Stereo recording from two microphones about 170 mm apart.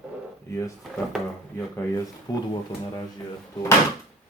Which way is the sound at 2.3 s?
20° left (ahead or behind).